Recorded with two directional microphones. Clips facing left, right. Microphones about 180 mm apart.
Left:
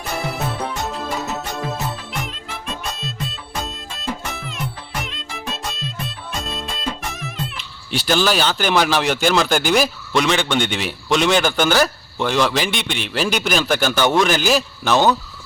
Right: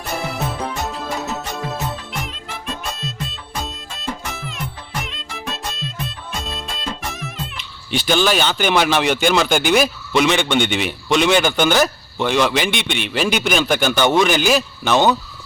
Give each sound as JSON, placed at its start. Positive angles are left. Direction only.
{"t": 0.5, "sound": "music", "side_deg": 0}
{"t": 7.9, "sound": "speech", "side_deg": 0}